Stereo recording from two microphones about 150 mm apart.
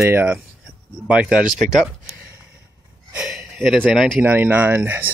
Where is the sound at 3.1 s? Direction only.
5° right (ahead or behind).